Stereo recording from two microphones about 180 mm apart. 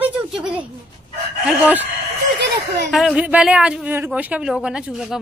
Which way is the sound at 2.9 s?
Centre (ahead or behind).